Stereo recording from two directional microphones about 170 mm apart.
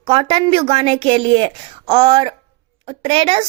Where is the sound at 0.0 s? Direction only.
35° right (ahead or behind).